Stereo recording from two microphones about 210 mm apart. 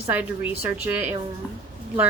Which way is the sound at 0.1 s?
10° right (ahead or behind).